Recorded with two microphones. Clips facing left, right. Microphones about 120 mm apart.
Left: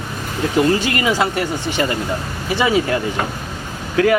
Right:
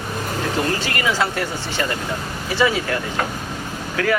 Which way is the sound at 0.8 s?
15° left (ahead or behind).